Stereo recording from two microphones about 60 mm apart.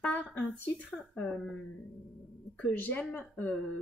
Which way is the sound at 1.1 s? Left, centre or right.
Left.